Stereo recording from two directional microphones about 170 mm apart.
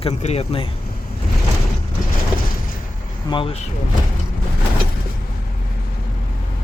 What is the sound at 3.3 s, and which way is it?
Speech, 30° left (ahead or behind).